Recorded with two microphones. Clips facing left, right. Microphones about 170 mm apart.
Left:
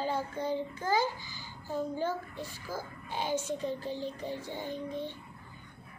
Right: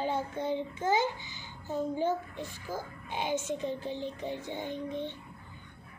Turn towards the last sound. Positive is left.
turn(degrees=-20)  # may be behind; listen again after turning